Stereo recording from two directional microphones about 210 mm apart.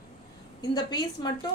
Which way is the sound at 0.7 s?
20° left (ahead or behind).